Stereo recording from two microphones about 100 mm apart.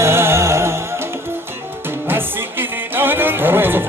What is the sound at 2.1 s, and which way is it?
Music, 20° right (ahead or behind).